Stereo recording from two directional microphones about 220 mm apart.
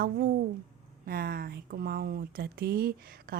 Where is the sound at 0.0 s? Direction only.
40° right (ahead or behind).